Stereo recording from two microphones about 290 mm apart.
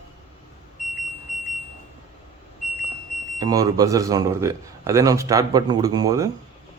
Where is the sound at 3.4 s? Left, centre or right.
Centre.